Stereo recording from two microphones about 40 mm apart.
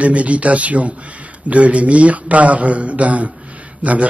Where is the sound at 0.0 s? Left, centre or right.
Right.